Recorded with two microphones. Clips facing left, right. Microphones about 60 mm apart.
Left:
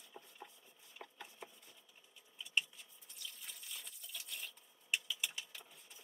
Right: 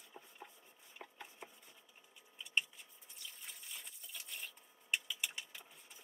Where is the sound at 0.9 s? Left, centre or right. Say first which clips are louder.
Even; centre.